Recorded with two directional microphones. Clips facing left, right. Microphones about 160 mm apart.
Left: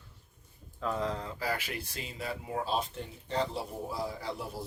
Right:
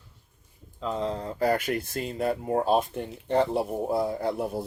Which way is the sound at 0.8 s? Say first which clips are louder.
Right 4 dB; 25° right (ahead or behind).